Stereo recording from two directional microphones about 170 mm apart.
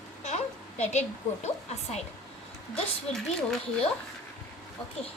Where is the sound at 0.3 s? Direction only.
40° left (ahead or behind).